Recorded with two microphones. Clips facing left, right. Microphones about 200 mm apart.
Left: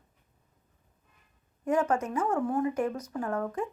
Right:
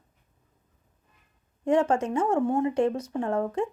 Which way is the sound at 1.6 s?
30° right (ahead or behind).